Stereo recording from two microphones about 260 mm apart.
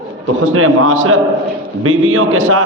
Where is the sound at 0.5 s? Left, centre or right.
Right.